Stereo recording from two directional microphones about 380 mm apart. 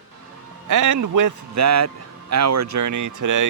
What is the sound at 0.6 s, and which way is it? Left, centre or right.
A man's voice, right.